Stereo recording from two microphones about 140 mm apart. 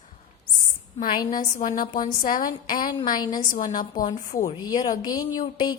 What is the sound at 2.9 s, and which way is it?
Speech, 30° left (ahead or behind).